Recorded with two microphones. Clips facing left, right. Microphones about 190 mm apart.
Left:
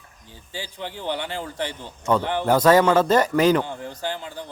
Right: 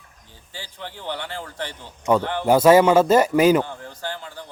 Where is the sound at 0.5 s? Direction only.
15° left (ahead or behind).